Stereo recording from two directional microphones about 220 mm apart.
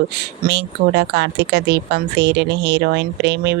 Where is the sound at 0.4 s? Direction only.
50° right (ahead or behind).